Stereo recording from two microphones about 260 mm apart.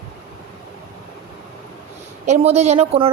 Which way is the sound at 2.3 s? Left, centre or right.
Right.